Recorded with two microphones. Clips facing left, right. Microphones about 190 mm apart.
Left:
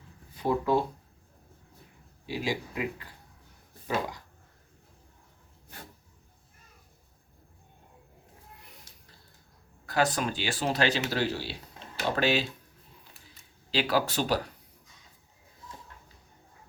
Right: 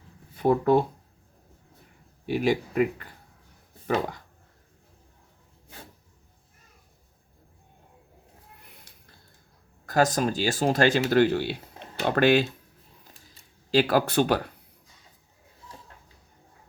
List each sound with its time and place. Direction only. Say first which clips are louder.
0.3 s speech: right 6 dB; 55° right (ahead or behind)
2.2 s speech: right 8 dB; 55° right (ahead or behind)
9.8 s speech: right 5 dB; 45° right (ahead or behind)
13.7 s speech: right 6 dB; 50° right (ahead or behind)